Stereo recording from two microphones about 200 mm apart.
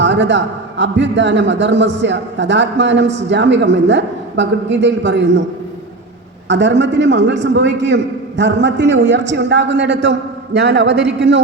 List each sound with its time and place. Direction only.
0.0 s a man's voice: 65° right (ahead or behind)
6.5 s a man's voice: 65° right (ahead or behind)